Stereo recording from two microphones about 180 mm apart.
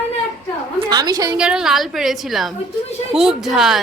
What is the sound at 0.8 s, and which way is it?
Speech, 20° right (ahead or behind).